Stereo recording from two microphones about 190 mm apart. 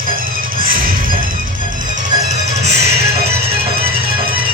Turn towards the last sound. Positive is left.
turn(degrees=-30)  # may be behind; listen again after turning